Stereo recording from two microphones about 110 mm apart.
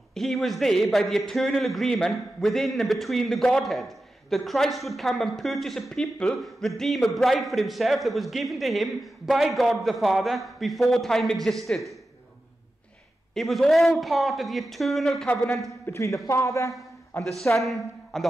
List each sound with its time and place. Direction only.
0.1 s a man's voice: centre (ahead or behind)
13.3 s a man's voice: centre (ahead or behind)
15.9 s a man's voice: 25° left (ahead or behind)
17.2 s a man's voice: centre (ahead or behind)